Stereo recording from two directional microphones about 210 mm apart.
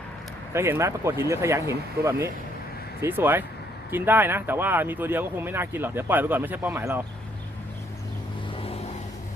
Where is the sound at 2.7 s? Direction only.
45° left (ahead or behind).